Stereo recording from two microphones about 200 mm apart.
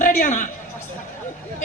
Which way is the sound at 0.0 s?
40° left (ahead or behind).